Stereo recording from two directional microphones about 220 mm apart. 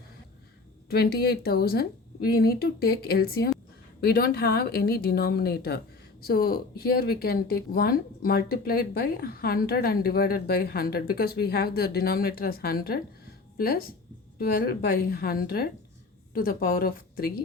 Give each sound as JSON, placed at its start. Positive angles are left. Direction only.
{"t": 0.9, "sound": "speech", "side_deg": 45}